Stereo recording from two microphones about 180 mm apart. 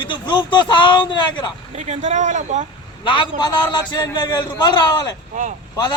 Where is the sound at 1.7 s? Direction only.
40° right (ahead or behind).